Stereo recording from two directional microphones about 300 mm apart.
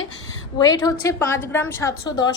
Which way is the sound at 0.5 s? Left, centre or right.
Centre.